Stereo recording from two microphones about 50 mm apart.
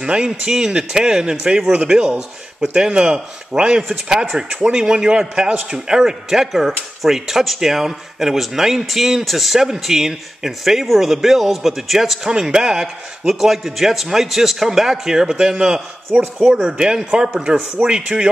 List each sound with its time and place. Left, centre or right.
0.0 s a man's voice: centre
12.3 s a man's voice: centre